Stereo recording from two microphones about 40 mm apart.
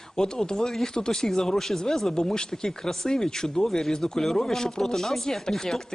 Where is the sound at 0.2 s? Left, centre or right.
Centre.